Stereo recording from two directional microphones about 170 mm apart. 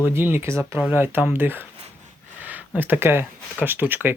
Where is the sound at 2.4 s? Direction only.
10° right (ahead or behind).